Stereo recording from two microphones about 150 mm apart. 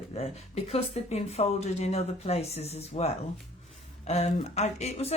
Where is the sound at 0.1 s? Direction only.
45° left (ahead or behind).